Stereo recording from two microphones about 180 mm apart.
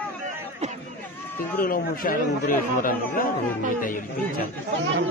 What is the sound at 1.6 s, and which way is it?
Speech, 50° left (ahead or behind).